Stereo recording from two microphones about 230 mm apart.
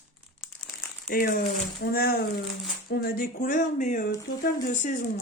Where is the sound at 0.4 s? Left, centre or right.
Centre.